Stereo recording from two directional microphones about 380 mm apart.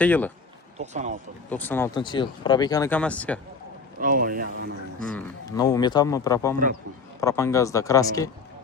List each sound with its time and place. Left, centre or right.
0.0 s speech: centre
0.8 s speech: centre
1.5 s speech: centre
4.0 s speech: right
5.1 s speech: centre